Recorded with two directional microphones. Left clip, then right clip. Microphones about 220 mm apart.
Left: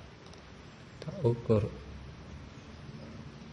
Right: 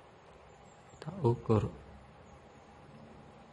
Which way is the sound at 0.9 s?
30° right (ahead or behind).